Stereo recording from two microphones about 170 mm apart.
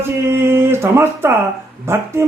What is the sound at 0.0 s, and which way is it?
A man's voice, 15° right (ahead or behind).